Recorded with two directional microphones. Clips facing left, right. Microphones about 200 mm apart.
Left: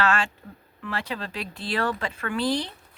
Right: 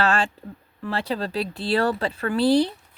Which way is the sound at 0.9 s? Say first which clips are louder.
Right 5 dB; 35° right (ahead or behind).